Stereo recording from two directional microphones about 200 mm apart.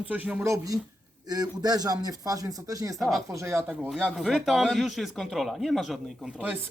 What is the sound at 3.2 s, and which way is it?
A man's voice, 15° right (ahead or behind).